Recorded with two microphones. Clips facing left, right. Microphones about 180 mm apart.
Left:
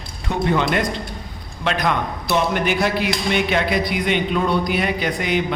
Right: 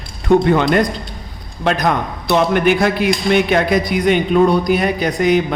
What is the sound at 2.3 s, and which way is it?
A man's voice, 60° right (ahead or behind).